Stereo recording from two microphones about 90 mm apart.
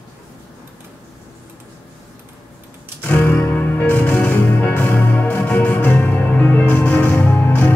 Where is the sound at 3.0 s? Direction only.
20° left (ahead or behind).